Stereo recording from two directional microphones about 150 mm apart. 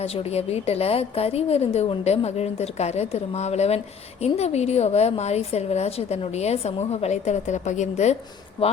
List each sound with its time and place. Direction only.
0.0 s a woman's voice: 45° left (ahead or behind)
8.6 s speech: 40° left (ahead or behind)